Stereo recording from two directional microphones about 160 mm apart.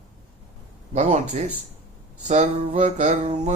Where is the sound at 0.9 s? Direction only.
50° right (ahead or behind).